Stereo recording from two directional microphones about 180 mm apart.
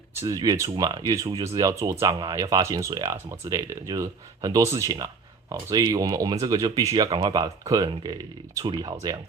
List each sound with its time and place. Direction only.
0.2 s speech: 20° right (ahead or behind)